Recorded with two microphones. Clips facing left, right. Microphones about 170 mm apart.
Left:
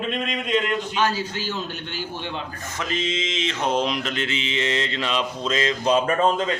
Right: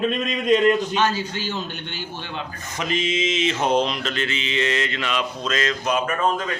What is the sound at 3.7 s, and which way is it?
Mantra, 10° left (ahead or behind).